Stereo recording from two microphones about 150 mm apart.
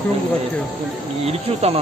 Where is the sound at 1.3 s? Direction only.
45° right (ahead or behind).